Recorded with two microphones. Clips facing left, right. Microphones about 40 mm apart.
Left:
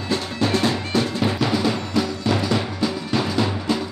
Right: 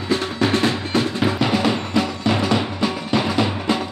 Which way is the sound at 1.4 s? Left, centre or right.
Right.